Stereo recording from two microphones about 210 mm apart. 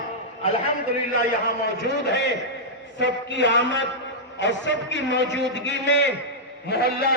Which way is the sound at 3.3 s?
55° left (ahead or behind).